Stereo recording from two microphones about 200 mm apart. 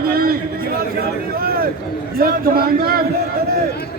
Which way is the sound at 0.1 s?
50° right (ahead or behind).